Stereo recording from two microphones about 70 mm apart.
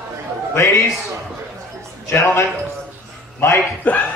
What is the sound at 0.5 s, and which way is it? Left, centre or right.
Speech, left.